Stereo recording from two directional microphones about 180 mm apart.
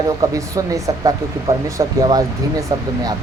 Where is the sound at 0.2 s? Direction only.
20° right (ahead or behind).